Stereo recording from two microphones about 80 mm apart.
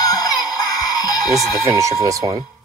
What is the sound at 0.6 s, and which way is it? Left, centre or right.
Music, left.